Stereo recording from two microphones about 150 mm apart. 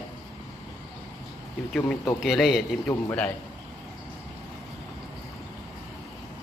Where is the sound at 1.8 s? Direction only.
15° left (ahead or behind).